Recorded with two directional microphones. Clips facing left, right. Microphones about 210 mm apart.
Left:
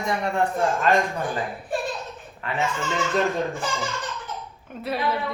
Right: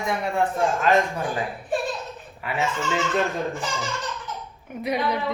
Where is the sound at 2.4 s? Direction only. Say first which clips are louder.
Even; 5° right (ahead or behind).